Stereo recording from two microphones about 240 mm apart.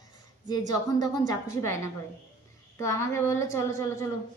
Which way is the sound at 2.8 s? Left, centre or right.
Centre.